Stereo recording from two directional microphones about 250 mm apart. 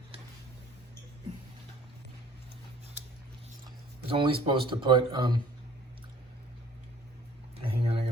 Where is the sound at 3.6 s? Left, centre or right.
Right.